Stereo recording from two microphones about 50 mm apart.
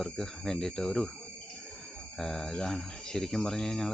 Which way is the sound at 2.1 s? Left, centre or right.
Centre.